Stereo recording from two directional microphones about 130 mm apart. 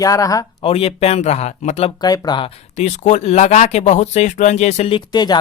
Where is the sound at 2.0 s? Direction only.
30° left (ahead or behind).